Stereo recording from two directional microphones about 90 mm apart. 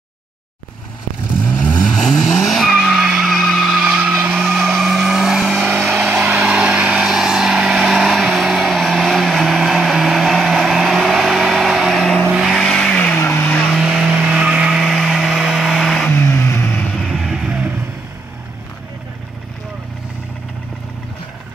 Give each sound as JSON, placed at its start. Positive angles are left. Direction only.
{"t": 1.8, "sound": "skidding", "side_deg": 5}
{"t": 3.8, "sound": "vehicle", "side_deg": -15}
{"t": 4.7, "sound": "vehicle", "side_deg": -5}
{"t": 12.3, "sound": "vehicle", "side_deg": -10}
{"t": 12.5, "sound": "vehicle", "side_deg": 10}
{"t": 13.7, "sound": "vehicle", "side_deg": 0}
{"t": 16.1, "sound": "vehicle", "side_deg": 25}
{"t": 16.9, "sound": "music", "side_deg": 0}